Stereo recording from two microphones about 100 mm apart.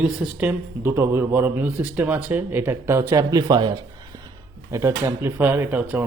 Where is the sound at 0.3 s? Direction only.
20° right (ahead or behind); by 3.8 s 45° right (ahead or behind).